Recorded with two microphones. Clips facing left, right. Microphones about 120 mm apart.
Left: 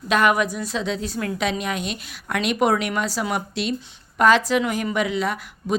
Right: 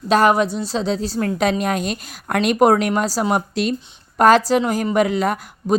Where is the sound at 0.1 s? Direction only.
35° right (ahead or behind).